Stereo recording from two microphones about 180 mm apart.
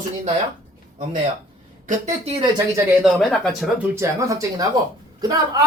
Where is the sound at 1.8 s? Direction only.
40° right (ahead or behind).